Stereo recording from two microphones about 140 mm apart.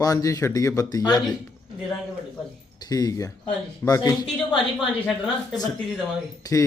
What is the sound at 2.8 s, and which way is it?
Speech, 25° left (ahead or behind).